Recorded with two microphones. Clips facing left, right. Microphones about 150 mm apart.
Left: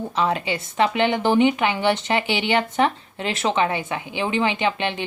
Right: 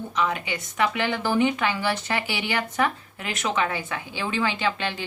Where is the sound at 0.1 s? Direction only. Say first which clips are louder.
Left 3 dB; 30° left (ahead or behind).